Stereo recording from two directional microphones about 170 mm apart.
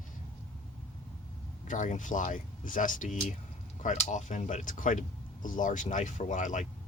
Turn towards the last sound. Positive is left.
turn(degrees=45)  # may be behind; listen again after turning